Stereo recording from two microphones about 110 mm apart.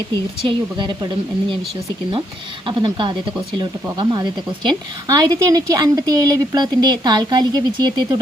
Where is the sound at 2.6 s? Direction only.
45° right (ahead or behind).